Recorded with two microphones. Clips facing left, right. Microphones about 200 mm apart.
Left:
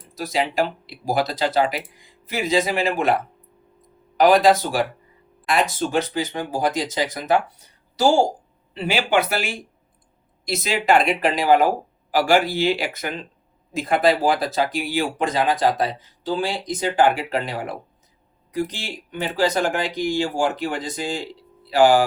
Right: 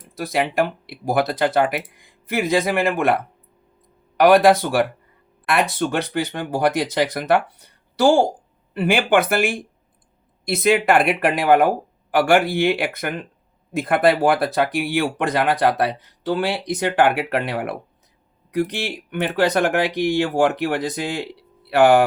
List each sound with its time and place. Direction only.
0.2 s speech: 55° right (ahead or behind)
4.2 s speech: 60° right (ahead or behind)